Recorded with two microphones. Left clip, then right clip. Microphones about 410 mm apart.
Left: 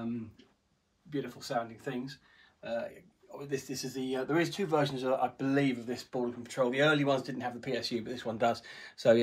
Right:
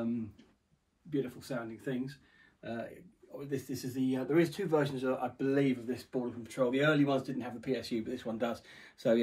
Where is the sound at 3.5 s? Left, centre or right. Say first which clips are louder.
Left 1 dB; centre.